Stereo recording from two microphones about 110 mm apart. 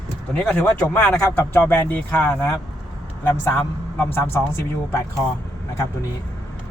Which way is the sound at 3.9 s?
20° left (ahead or behind).